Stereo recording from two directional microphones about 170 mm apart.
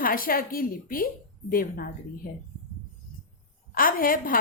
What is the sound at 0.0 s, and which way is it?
A woman's voice, 55° left (ahead or behind).